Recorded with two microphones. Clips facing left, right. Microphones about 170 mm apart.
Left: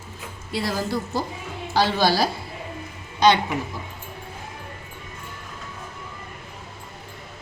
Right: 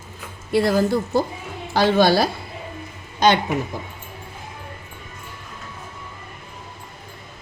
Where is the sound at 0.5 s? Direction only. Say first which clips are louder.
Right 8 dB; 55° right (ahead or behind).